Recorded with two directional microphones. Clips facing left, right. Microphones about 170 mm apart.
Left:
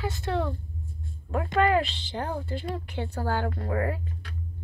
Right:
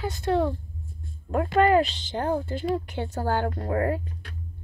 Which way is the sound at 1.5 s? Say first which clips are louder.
Right 3 dB; 40° right (ahead or behind).